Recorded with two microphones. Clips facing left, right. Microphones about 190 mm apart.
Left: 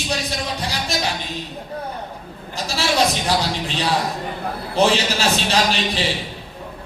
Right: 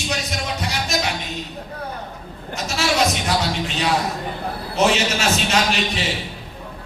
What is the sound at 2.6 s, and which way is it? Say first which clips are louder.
A man's voice: left 1 dB; 30° left (ahead or behind).